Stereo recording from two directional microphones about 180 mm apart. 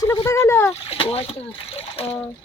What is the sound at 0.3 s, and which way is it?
Speech, 15° left (ahead or behind).